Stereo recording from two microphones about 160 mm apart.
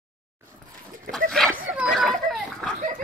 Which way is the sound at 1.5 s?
5° right (ahead or behind).